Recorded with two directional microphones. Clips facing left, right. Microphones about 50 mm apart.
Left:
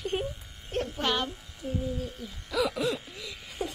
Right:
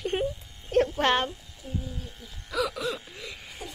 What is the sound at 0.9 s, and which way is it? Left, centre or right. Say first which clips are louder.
Speech: right 5 dB; right.